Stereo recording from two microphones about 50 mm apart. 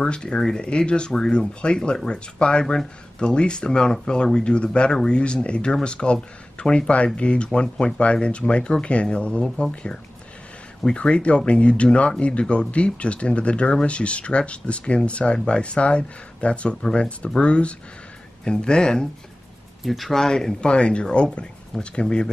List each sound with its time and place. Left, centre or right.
0.0 s speech: centre
11.0 s speech: left
19.8 s speech: centre